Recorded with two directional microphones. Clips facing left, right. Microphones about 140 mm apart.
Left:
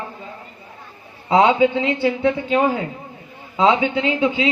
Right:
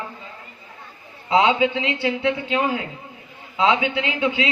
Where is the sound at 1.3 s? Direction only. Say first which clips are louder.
Left 3 dB; 40° left (ahead or behind).